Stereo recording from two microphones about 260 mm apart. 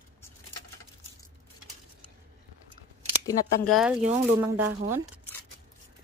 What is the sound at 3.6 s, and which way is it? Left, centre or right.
A woman's voice, centre.